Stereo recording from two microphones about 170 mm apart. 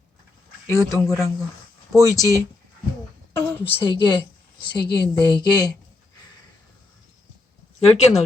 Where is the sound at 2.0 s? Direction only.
20° left (ahead or behind).